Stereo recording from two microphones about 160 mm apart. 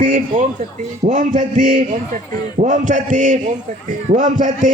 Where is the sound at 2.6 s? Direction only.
50° right (ahead or behind).